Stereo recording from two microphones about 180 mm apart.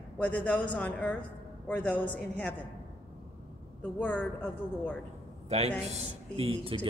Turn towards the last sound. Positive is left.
turn(degrees=-35)  # may be behind; listen again after turning